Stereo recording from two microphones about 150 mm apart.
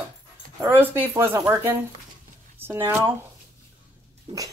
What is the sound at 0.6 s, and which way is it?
Speech, 15° right (ahead or behind).